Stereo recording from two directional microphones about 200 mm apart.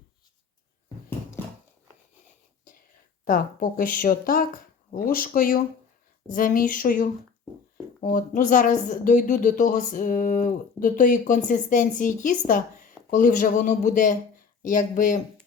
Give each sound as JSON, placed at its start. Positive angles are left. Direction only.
{"t": 3.2, "sound": "speech", "side_deg": 45}